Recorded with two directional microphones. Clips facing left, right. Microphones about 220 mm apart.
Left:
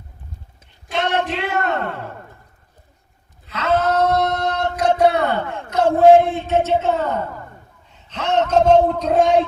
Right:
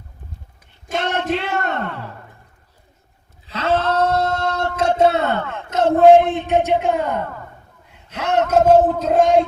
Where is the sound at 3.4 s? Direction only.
30° right (ahead or behind).